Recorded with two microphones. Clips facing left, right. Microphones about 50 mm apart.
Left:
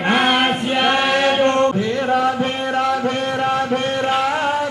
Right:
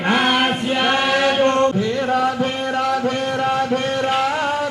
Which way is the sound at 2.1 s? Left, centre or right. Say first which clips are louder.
Left 2 dB; left.